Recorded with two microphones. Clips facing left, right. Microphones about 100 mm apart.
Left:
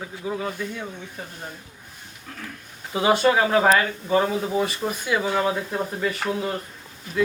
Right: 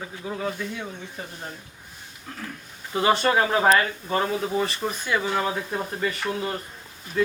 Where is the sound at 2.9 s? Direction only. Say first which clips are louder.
Left 2 dB; 10° left (ahead or behind).